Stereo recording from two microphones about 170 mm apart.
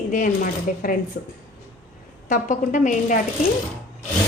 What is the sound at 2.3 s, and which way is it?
Speech, 45° left (ahead or behind).